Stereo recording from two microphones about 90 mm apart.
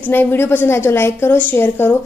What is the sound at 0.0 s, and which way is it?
A woman's voice, 20° left (ahead or behind).